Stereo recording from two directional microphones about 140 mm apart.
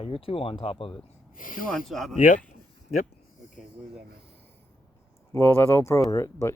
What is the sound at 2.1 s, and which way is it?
Speech, 70° left (ahead or behind).